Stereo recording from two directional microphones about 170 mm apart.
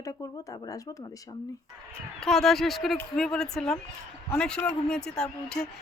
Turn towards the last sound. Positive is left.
turn(degrees=5)  # may be behind; listen again after turning